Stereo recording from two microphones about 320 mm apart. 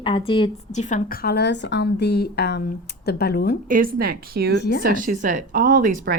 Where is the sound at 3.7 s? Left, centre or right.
Right.